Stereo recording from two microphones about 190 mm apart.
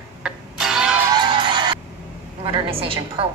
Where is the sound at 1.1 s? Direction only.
25° right (ahead or behind).